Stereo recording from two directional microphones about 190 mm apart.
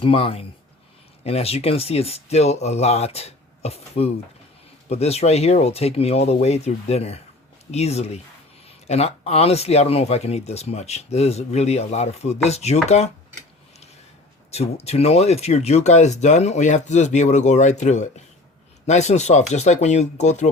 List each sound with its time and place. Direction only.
0.0 s speech: 30° left (ahead or behind)
14.5 s speech: 35° left (ahead or behind)